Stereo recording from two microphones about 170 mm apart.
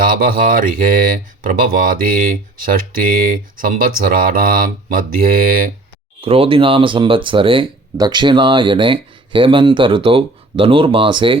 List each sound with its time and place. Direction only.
0.0 s speech: 55° right (ahead or behind)
6.2 s speech: 35° right (ahead or behind)